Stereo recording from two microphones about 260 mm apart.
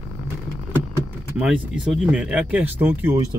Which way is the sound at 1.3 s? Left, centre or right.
Centre.